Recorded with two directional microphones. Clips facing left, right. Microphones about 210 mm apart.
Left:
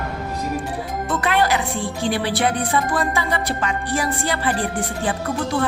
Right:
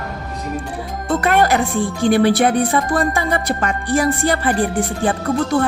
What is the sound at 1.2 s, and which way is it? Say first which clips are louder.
Speech: right 4 dB; 45° right (ahead or behind).